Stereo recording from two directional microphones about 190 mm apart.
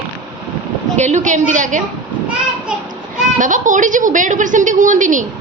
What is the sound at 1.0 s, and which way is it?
Speech, 40° right (ahead or behind).